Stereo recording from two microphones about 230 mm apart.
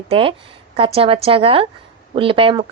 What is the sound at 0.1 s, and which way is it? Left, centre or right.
Speech, right.